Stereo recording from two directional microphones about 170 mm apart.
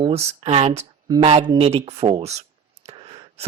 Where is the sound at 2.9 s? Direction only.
35° right (ahead or behind).